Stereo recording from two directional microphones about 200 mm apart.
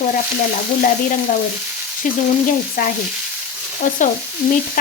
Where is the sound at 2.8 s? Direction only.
45° left (ahead or behind).